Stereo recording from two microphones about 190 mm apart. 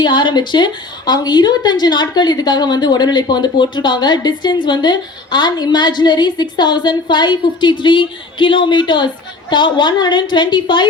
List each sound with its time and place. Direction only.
0.0 s a woman's voice: 25° left (ahead or behind)